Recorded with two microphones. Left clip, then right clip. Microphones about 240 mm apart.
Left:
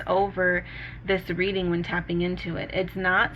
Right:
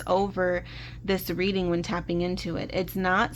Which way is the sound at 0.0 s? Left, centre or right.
Right.